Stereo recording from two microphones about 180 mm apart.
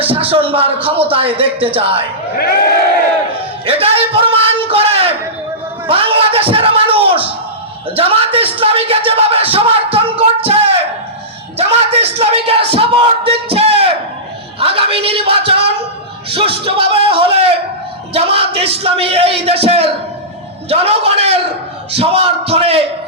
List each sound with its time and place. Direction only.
0.0 s speech: 30° right (ahead or behind)
3.7 s a sound: 30° right (ahead or behind)
5.9 s speech: 30° right (ahead or behind)